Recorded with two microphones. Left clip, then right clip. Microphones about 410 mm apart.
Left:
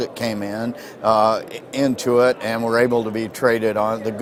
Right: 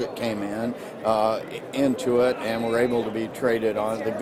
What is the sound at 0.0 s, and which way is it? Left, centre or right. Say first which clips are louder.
Speech: left 3 dB; left.